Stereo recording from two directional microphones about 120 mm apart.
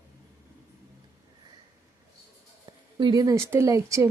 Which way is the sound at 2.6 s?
40° right (ahead or behind).